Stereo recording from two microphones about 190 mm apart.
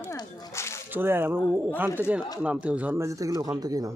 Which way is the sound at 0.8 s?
10° right (ahead or behind).